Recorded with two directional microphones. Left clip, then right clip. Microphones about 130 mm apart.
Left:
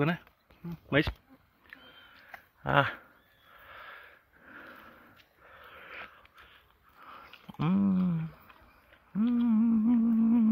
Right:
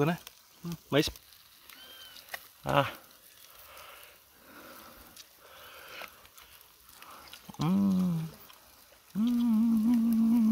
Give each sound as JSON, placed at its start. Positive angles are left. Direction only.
{"t": 0.8, "sound": "speech", "side_deg": -10}
{"t": 2.6, "sound": "speech", "side_deg": -5}
{"t": 3.6, "sound": "sniff", "side_deg": -15}
{"t": 4.5, "sound": "a sound", "side_deg": -10}
{"t": 5.5, "sound": "sniff", "side_deg": -20}
{"t": 7.4, "sound": "a sound", "side_deg": -15}
{"t": 9.1, "sound": "humming", "side_deg": 0}